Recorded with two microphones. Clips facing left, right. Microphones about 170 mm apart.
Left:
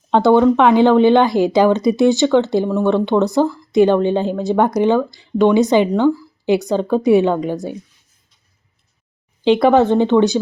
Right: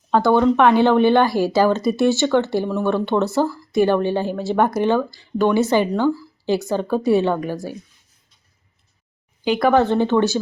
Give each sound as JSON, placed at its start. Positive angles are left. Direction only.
{"t": 0.1, "sound": "a woman's voice", "side_deg": 20}
{"t": 9.6, "sound": "speech", "side_deg": 20}